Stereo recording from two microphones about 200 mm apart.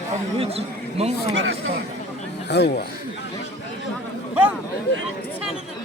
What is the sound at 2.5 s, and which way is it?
Speech, 55° left (ahead or behind).